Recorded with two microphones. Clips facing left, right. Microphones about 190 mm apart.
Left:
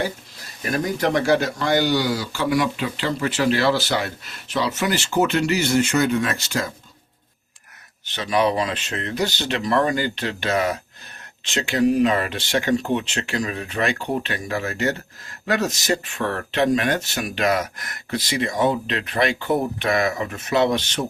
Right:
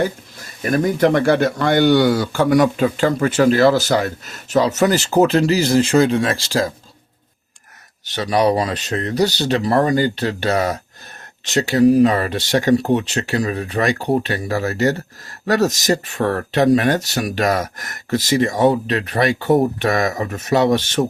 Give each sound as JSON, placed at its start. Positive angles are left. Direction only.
{"t": 0.7, "sound": "speech", "side_deg": -55}
{"t": 8.0, "sound": "speech", "side_deg": -40}